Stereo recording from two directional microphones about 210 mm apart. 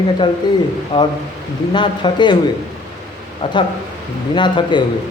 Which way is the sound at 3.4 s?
25° left (ahead or behind).